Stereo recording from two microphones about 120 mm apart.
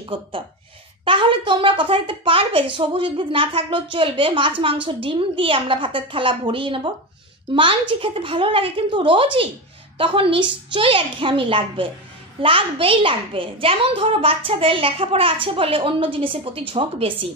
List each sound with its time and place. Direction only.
1.0 s a child's voice: 45° right (ahead or behind)
7.9 s a child's voice: 50° right (ahead or behind)